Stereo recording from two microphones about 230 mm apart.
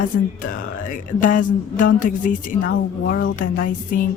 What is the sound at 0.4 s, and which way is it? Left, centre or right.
Music, left.